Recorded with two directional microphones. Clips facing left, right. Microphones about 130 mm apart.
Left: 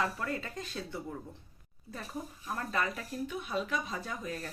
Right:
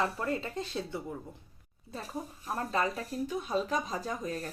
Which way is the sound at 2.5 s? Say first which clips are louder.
Right 3 dB; 30° right (ahead or behind).